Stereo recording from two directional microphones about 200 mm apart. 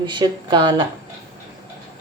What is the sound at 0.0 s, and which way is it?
Speech, 20° right (ahead or behind).